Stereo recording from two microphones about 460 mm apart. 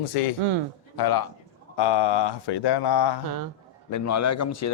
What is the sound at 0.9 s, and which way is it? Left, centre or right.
Speech, left.